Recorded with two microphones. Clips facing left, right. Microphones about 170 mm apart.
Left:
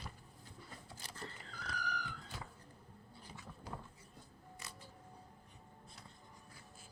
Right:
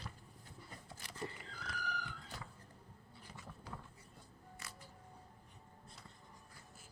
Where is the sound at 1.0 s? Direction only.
30° left (ahead or behind).